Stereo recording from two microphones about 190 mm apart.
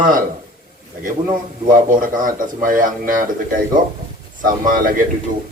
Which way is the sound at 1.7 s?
45° right (ahead or behind).